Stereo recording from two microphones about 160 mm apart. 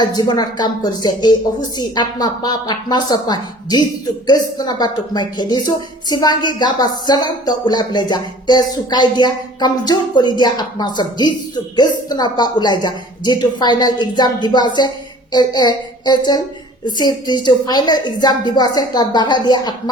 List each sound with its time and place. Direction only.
0.0 s speech: 25° left (ahead or behind)